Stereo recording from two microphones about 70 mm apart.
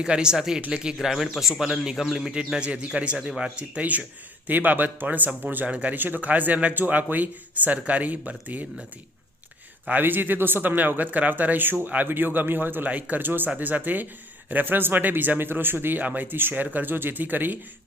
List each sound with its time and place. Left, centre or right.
0.0 s speech: centre
9.9 s speech: right